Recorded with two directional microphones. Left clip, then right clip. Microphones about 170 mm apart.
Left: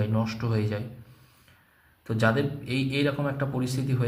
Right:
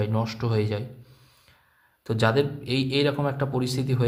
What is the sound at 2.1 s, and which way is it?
A man's voice, 35° right (ahead or behind).